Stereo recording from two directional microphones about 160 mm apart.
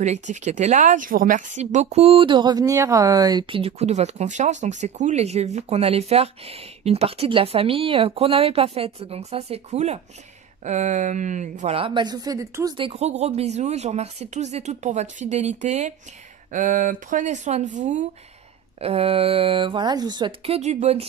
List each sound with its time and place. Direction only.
0.0 s a woman's voice: 45° right (ahead or behind)
11.7 s speech: 30° right (ahead or behind)
12.7 s speech: 35° right (ahead or behind)
18.8 s a woman's voice: 40° right (ahead or behind)